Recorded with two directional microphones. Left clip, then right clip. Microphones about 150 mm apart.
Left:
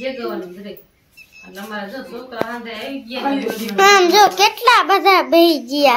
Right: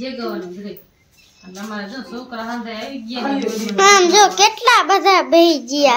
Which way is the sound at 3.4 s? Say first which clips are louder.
Even; centre (ahead or behind).